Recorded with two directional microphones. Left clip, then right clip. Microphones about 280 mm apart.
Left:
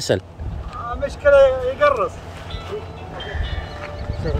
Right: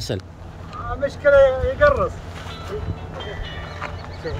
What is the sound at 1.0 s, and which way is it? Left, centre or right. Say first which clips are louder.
Speech: left 1 dB; left.